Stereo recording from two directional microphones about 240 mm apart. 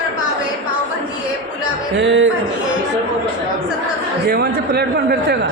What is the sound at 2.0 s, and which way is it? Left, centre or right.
Speech, right.